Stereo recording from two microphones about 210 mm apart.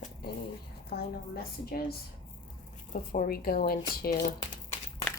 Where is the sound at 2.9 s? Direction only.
40° left (ahead or behind).